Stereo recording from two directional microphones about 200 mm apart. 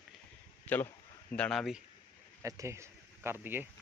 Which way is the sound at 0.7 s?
10° left (ahead or behind).